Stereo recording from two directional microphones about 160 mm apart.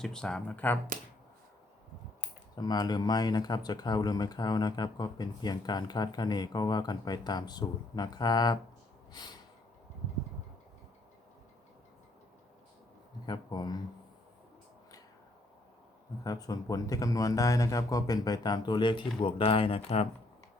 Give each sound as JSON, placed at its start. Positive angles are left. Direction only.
{"t": 0.0, "sound": "speech", "side_deg": 5}
{"t": 2.6, "sound": "speech", "side_deg": 25}
{"t": 13.2, "sound": "speech", "side_deg": 25}
{"t": 16.2, "sound": "speech", "side_deg": 20}